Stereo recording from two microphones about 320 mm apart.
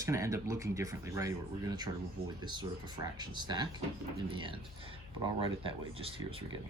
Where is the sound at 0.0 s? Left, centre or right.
Centre.